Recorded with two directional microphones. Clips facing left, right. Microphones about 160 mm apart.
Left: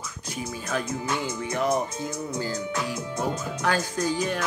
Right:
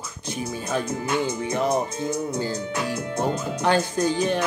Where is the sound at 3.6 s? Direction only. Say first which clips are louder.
Right 5 dB; 25° right (ahead or behind).